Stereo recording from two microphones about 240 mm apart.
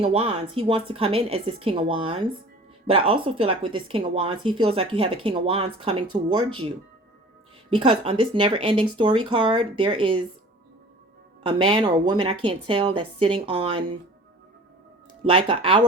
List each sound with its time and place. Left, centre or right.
0.0 s speech: right
7.7 s speech: right
11.4 s speech: centre
15.2 s speech: right